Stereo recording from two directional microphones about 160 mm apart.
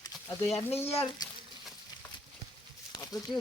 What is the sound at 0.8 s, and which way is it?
Speech, 40° left (ahead or behind).